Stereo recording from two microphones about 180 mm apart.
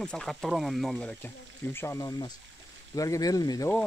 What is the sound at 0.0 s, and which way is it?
Speech, 5° left (ahead or behind).